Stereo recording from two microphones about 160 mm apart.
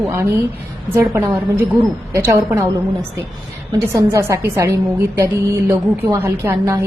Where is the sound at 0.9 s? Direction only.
20° right (ahead or behind).